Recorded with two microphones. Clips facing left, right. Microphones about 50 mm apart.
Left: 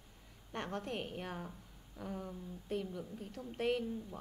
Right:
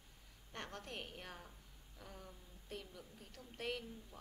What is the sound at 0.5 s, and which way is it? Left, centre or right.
A woman's voice, left.